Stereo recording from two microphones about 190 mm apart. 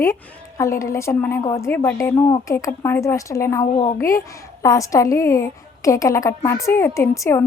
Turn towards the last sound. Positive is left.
turn(degrees=15)  # may be behind; listen again after turning